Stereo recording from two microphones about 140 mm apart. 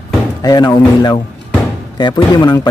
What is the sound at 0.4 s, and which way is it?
Speech, 30° left (ahead or behind).